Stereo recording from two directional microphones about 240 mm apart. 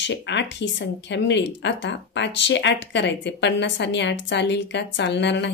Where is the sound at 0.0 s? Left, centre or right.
Left.